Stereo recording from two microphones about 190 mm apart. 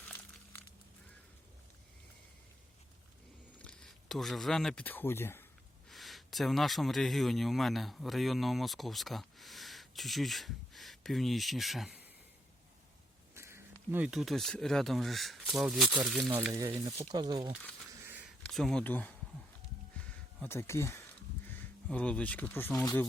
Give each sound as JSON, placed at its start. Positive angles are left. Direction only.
{"t": 3.6, "sound": "speech", "side_deg": 5}
{"t": 5.9, "sound": "speech", "side_deg": 0}
{"t": 13.3, "sound": "a sound", "side_deg": -15}
{"t": 13.9, "sound": "speech", "side_deg": -5}
{"t": 16.5, "sound": "speech", "side_deg": -15}
{"t": 18.0, "sound": "a sound", "side_deg": -10}
{"t": 18.4, "sound": "speech", "side_deg": 5}
{"t": 20.0, "sound": "a sound", "side_deg": 10}
{"t": 21.4, "sound": "speech", "side_deg": 10}